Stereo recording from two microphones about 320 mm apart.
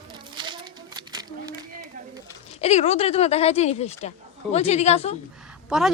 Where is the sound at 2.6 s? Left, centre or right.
Centre.